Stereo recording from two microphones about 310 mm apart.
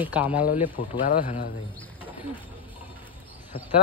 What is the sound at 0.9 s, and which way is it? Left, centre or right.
Speech, left.